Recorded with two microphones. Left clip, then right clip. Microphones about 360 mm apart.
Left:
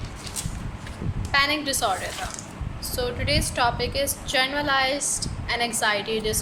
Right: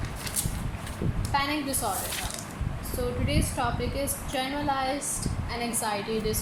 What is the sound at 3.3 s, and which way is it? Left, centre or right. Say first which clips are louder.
A woman's voice: left 9 dB; left.